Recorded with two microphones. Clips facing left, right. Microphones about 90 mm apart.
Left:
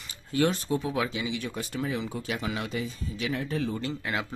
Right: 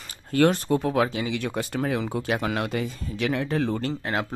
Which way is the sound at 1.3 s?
65° right (ahead or behind).